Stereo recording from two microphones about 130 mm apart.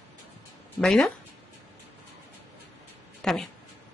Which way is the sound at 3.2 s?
5° left (ahead or behind).